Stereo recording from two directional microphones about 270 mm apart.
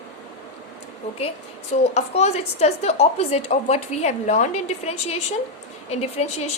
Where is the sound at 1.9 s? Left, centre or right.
Left.